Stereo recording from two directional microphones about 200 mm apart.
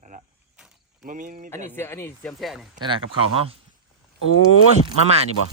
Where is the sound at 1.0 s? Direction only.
40° right (ahead or behind).